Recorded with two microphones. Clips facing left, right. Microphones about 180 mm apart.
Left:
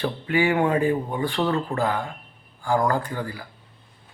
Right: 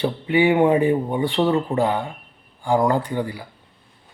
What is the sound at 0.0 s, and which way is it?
Speech, 20° right (ahead or behind).